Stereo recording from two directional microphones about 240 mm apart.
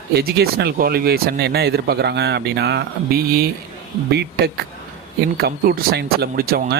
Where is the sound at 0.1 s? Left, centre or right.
Right.